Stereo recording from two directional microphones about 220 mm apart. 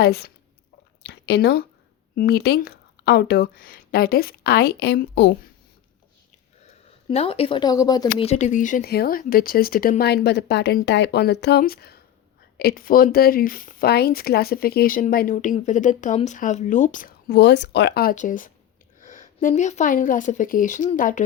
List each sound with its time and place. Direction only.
0.0 s speech: 45° left (ahead or behind)
7.1 s speech: 25° left (ahead or behind)
8.3 s a woman's voice: 35° left (ahead or behind)